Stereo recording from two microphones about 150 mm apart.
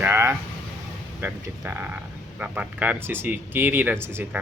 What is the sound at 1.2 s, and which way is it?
Speech, 15° right (ahead or behind).